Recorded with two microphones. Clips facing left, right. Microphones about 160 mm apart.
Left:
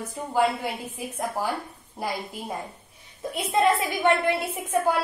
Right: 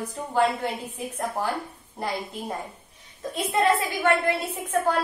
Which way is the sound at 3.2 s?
15° left (ahead or behind).